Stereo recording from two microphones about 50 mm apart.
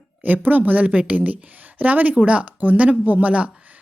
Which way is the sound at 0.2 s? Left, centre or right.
Right.